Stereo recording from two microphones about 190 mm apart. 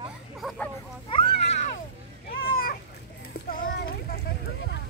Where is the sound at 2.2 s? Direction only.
50° left (ahead or behind).